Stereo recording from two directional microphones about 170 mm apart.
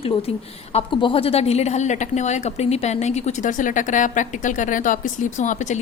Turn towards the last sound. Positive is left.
turn(degrees=45)  # may be behind; listen again after turning